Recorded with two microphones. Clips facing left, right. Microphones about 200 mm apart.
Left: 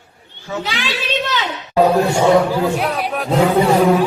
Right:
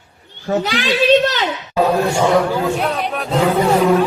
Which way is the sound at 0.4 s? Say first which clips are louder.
Right 6 dB; 45° right (ahead or behind).